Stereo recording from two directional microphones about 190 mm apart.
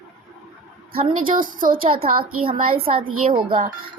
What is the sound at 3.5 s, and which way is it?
Speech, 45° right (ahead or behind).